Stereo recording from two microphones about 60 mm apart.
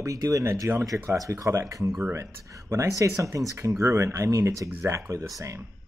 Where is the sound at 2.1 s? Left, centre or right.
Right.